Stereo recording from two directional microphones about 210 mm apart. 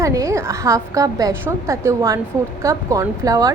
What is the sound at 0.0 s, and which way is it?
A woman's voice, 15° right (ahead or behind).